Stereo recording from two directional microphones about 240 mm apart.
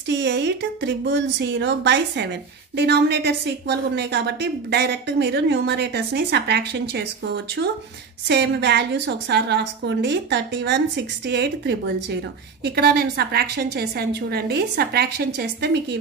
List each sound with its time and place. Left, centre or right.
0.1 s a woman's voice: right
8.3 s a woman's voice: right